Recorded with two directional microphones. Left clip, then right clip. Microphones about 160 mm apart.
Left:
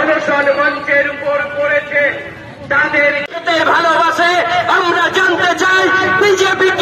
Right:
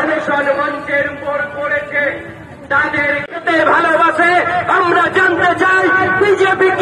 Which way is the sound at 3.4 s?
20° right (ahead or behind).